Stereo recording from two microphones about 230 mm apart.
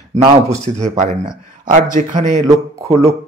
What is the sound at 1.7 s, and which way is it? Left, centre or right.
Speech, right.